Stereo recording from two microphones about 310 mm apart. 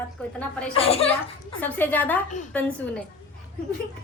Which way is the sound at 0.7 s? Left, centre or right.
Centre.